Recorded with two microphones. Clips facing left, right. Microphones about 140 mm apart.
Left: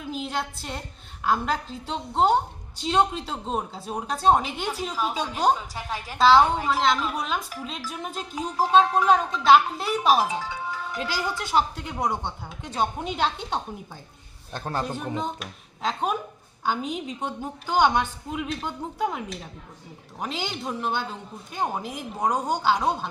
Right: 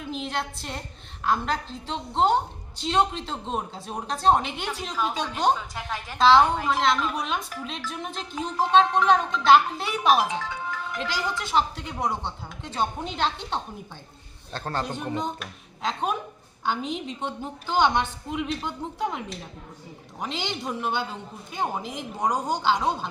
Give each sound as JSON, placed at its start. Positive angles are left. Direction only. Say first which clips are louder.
{"t": 0.1, "sound": "a woman's voice", "louder": "left 1 dB", "side_deg": 5}